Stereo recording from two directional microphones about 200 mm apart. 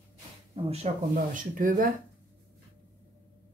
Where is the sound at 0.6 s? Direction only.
35° right (ahead or behind).